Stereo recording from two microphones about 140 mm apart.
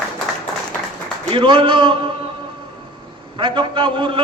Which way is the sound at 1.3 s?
35° right (ahead or behind).